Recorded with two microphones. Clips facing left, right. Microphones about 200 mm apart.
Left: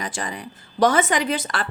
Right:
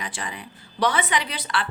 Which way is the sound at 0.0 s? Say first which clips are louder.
Left 4 dB; 45° left (ahead or behind).